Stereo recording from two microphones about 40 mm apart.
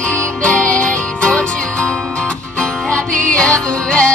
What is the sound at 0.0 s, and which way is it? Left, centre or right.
Music, left.